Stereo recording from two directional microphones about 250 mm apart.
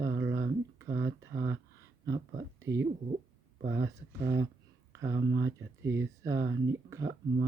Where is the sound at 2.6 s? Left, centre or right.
Centre.